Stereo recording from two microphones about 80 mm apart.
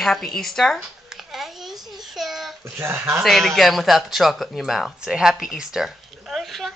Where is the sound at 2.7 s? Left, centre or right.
Right.